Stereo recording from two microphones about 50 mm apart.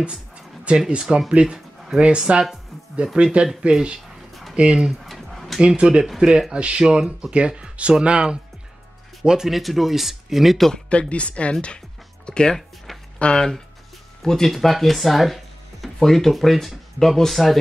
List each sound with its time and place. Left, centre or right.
0.7 s speech: centre
4.3 s a sound: centre
4.6 s speech: right
4.9 s a sound: centre
5.6 s speech: centre
9.5 s speech: centre
10.7 s speech: left
12.5 s a sound: centre
13.2 s speech: centre